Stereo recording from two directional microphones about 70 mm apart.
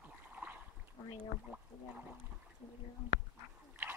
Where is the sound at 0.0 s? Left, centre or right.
Right.